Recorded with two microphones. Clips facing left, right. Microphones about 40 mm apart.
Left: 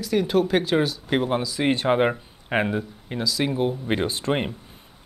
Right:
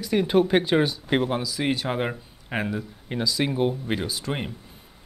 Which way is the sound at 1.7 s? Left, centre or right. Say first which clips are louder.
Left 6 dB; left.